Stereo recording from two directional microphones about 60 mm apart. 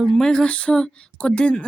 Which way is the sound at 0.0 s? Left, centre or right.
Centre.